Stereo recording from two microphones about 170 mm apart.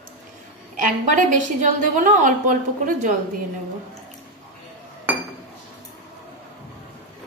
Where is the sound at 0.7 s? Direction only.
50° right (ahead or behind).